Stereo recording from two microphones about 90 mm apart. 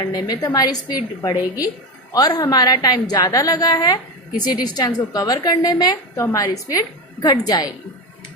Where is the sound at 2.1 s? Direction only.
45° left (ahead or behind).